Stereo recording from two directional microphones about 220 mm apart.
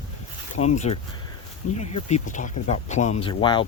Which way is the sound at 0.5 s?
30° left (ahead or behind).